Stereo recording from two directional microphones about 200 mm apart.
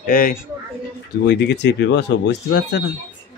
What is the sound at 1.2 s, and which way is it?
Speech, 55° left (ahead or behind).